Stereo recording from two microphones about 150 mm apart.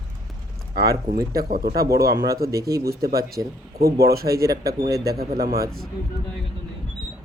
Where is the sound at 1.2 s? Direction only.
85° right.